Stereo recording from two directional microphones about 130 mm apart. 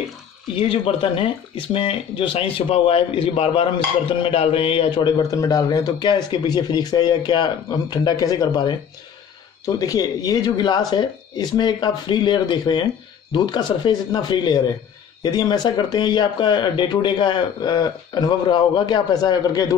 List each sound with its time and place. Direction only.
0.6 s speech: 45° left (ahead or behind); by 19.7 s 30° left (ahead or behind)